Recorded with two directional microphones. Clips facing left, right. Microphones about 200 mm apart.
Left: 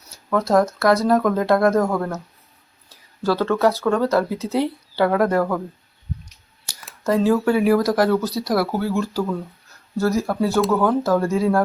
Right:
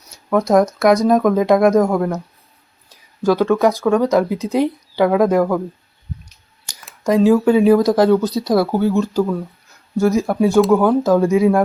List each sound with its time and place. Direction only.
0.3 s speech: 15° right (ahead or behind)
7.0 s speech: 15° right (ahead or behind)